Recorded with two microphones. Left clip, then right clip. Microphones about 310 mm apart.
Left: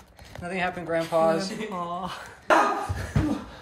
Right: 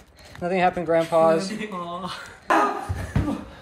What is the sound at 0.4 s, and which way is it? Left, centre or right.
Speech, centre.